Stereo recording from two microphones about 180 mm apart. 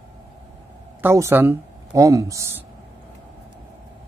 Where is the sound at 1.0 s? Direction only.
15° right (ahead or behind).